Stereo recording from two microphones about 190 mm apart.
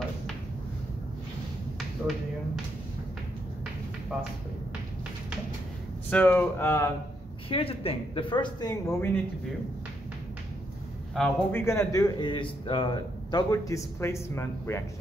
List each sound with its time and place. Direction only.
6.0 s a man's voice: 10° left (ahead or behind)
7.4 s speech: 30° left (ahead or behind)
11.1 s a man's voice: 5° left (ahead or behind)
11.6 s a man's voice: 15° left (ahead or behind)